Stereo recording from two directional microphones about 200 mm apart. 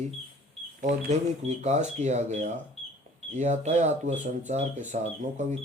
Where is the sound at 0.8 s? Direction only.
35° right (ahead or behind).